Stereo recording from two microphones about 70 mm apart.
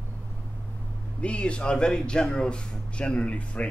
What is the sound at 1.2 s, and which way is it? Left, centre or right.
Speech, centre.